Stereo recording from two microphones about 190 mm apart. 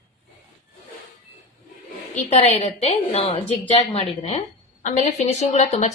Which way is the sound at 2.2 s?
35° left (ahead or behind).